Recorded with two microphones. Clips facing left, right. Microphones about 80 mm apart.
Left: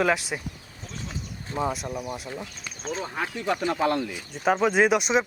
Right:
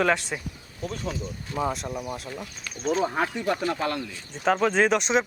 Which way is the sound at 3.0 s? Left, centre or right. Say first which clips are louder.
Right 5 dB; right.